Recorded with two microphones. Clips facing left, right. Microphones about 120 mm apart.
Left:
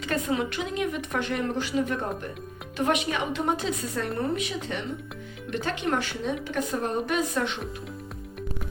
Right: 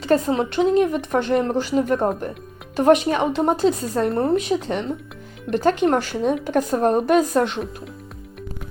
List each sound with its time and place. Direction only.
0.0 s a woman's voice: 35° right (ahead or behind)